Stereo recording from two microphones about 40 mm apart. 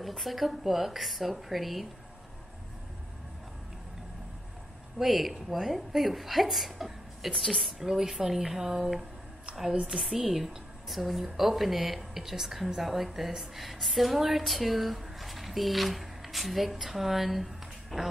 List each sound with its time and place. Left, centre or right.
0.1 s speech: centre
4.9 s speech: centre
7.8 s speech: centre
9.8 s speech: centre
10.0 s speech: centre